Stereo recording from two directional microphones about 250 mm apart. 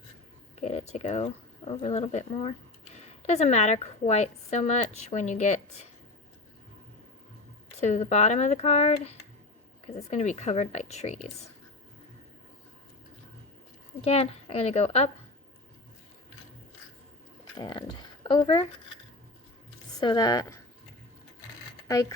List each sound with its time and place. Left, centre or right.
0.6 s a woman's voice: left
7.8 s a woman's voice: left
14.0 s a woman's voice: left
17.6 s speech: centre
19.9 s speech: centre